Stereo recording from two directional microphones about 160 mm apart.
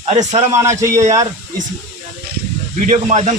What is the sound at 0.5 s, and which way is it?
Speech, 20° right (ahead or behind).